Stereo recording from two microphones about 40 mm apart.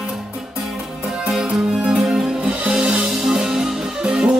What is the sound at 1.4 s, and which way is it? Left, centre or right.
Music, centre.